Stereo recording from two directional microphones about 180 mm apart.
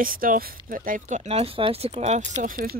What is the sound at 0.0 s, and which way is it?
Speech, 50° right (ahead or behind).